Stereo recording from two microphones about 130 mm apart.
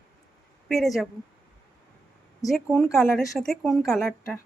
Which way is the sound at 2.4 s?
25° left (ahead or behind).